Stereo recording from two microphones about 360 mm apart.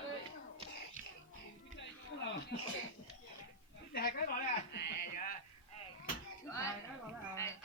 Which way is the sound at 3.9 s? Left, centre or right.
Left.